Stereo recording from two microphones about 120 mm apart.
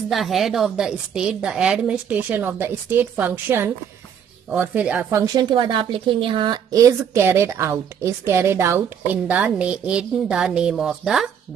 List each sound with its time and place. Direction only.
0.1 s a woman's voice: centre (ahead or behind)
5.1 s a woman's voice: 35° right (ahead or behind); by 11.2 s centre (ahead or behind)